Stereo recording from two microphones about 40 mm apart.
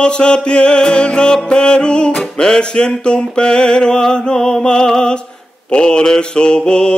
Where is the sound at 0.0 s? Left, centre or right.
Left.